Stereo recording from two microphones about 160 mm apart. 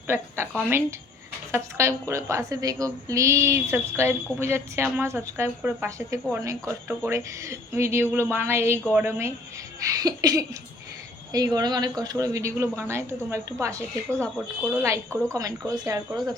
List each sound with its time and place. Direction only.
0.1 s a woman's voice: 10° right (ahead or behind)
1.5 s a woman's voice: 15° right (ahead or behind)